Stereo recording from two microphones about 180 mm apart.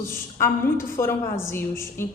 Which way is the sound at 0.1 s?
15° left (ahead or behind).